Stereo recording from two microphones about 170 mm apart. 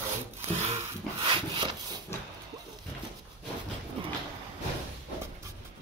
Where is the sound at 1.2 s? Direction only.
30° right (ahead or behind).